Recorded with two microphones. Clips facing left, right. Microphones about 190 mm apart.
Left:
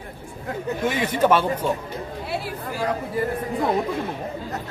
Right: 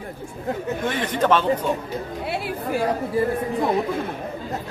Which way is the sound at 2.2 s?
60° right (ahead or behind).